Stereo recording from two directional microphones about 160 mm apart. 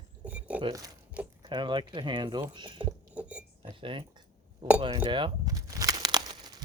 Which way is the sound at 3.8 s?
30° right (ahead or behind).